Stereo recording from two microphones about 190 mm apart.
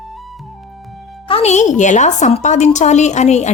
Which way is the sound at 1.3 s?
35° left (ahead or behind).